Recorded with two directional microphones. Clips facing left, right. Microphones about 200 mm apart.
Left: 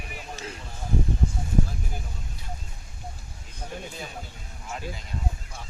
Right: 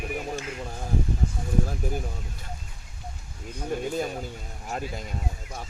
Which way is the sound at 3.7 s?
50° right (ahead or behind).